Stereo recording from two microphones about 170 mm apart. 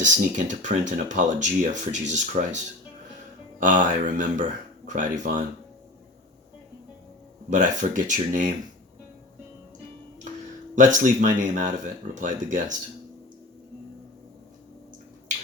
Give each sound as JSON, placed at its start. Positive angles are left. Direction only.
{"t": 0.0, "sound": "speech", "side_deg": -45}
{"t": 3.6, "sound": "speech", "side_deg": -50}
{"t": 7.5, "sound": "speech", "side_deg": -50}
{"t": 10.8, "sound": "speech", "side_deg": -50}